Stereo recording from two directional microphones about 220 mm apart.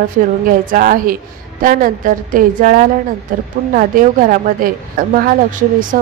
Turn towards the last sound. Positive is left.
turn(degrees=-35)  # may be behind; listen again after turning